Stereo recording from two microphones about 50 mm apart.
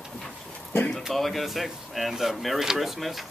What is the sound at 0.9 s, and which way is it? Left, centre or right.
Speech, centre.